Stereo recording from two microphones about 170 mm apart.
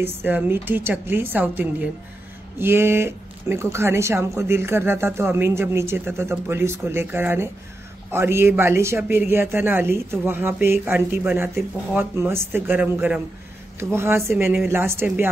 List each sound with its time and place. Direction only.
0.0 s speech: 10° right (ahead or behind)